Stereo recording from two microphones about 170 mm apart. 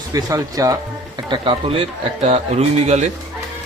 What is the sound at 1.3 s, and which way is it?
Speech, 30° right (ahead or behind).